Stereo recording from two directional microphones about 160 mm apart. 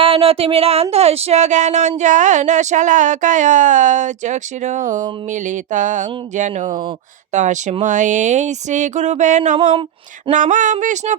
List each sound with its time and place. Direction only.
0.0 s speech: 35° right (ahead or behind); by 11.2 s 50° right (ahead or behind)